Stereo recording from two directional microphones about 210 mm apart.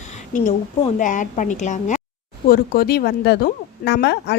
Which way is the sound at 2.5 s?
45° left (ahead or behind).